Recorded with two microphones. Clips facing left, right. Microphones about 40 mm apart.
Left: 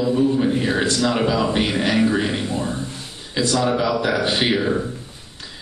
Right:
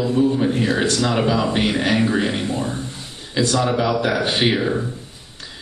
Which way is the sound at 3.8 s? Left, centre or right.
Right.